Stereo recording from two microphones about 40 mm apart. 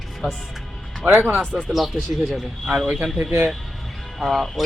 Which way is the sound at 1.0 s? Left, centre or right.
Right.